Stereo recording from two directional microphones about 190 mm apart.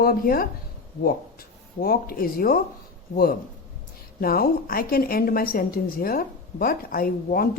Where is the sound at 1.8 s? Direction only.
50° left (ahead or behind).